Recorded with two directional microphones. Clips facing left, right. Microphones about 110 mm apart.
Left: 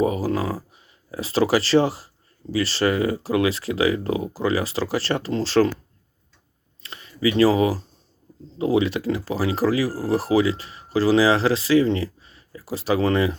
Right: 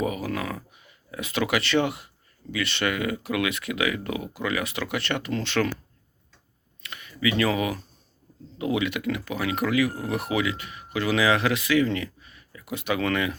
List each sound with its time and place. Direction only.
0.0 s speech: 30° left (ahead or behind)
6.8 s speech: 30° left (ahead or behind)